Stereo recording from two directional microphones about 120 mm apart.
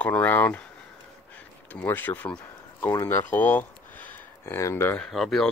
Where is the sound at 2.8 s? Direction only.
25° left (ahead or behind).